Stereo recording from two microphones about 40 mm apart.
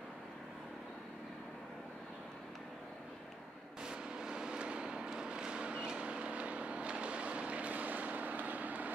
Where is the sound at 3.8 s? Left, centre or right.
Right.